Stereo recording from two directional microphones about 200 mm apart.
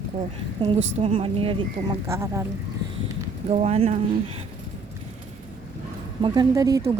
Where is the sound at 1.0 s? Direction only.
25° right (ahead or behind).